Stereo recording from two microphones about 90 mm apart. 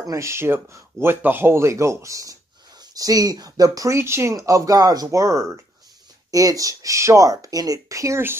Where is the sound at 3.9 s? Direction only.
30° right (ahead or behind).